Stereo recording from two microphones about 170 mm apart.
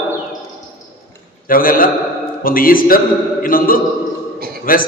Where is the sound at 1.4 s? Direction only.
55° left (ahead or behind).